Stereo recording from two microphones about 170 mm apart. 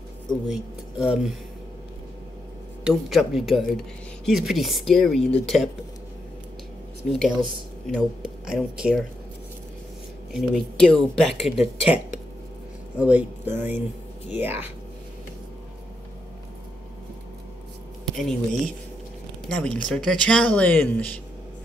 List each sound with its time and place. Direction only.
0.3 s speech: centre (ahead or behind)
2.8 s speech: centre (ahead or behind)
7.1 s speech: centre (ahead or behind)
10.3 s speech: centre (ahead or behind)
19.5 s speech: 5° left (ahead or behind)